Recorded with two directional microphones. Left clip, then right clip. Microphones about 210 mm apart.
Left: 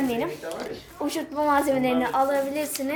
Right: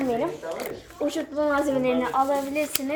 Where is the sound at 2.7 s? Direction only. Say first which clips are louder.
Even; 50° right (ahead or behind).